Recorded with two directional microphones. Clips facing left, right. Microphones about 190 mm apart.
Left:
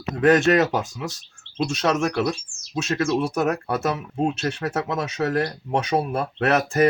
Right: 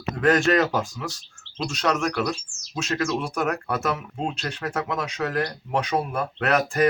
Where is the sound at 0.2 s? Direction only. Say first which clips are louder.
Left 3 dB; 20° left (ahead or behind).